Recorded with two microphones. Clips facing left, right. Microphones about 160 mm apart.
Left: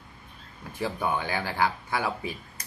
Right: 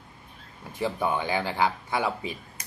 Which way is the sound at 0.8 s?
15° right (ahead or behind).